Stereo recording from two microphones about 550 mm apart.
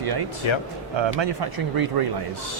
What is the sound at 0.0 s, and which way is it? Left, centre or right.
Speech, right.